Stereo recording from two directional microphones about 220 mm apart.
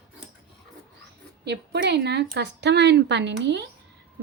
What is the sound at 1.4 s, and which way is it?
A woman's voice, 50° right (ahead or behind).